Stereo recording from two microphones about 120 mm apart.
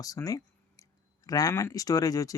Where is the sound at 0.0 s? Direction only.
30° left (ahead or behind).